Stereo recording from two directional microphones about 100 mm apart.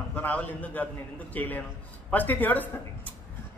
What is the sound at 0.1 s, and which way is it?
A man's voice, 15° left (ahead or behind).